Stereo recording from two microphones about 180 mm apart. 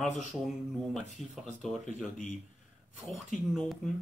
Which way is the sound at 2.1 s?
45° left (ahead or behind).